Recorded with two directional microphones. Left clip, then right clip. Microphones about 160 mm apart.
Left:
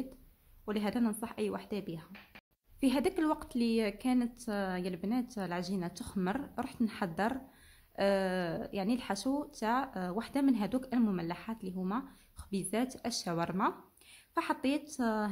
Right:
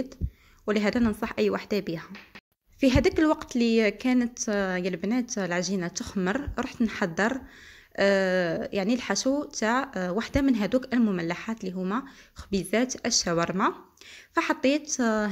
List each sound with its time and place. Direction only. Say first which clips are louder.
0.7 s a woman's voice: right 9 dB; 25° right (ahead or behind)
2.8 s a woman's voice: right 9 dB; 20° right (ahead or behind)